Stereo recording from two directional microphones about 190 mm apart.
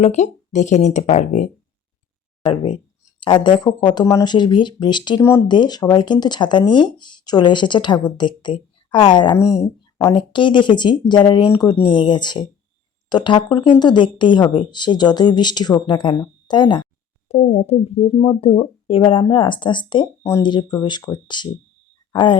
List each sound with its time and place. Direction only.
0.0 s speech: 40° left (ahead or behind)
3.2 s speech: 25° left (ahead or behind)
9.4 s speech: 5° right (ahead or behind)
10.0 s speech: 25° left (ahead or behind)